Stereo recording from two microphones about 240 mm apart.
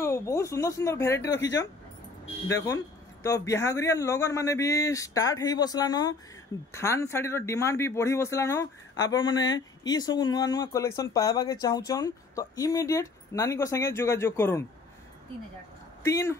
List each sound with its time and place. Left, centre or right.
0.0 s speech: centre
1.3 s speech: left
2.5 s speech: centre
16.0 s speech: centre